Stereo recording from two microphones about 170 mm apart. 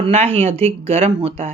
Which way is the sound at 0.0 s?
35° right (ahead or behind).